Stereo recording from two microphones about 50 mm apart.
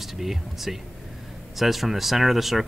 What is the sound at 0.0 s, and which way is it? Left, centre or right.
Speech, centre.